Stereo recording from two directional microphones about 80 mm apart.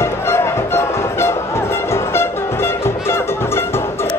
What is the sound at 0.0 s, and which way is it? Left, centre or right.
Music, left.